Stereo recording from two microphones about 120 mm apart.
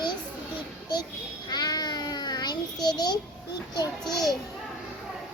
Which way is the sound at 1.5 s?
35° left (ahead or behind).